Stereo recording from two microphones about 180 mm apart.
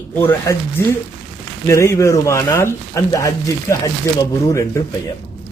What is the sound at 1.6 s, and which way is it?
Speech, 15° left (ahead or behind).